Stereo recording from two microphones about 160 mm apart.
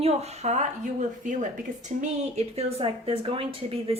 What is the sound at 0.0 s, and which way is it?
A woman's voice, 40° right (ahead or behind).